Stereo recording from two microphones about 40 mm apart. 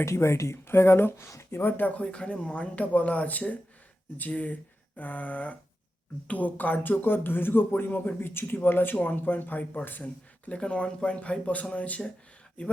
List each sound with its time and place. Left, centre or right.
0.5 s speech: left
1.7 s speech: left
9.0 s speech: left
10.5 s speech: left